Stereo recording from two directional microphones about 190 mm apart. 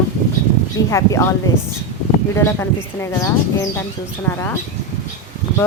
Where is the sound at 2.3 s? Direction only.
15° left (ahead or behind).